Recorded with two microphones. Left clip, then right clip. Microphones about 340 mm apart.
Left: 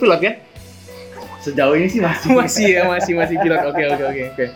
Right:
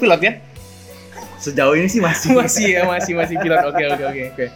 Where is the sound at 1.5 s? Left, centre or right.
Right.